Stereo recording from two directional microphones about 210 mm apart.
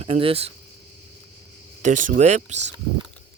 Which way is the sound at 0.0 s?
25° right (ahead or behind).